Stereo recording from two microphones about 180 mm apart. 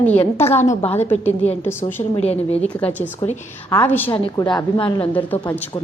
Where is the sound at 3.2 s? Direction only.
40° left (ahead or behind).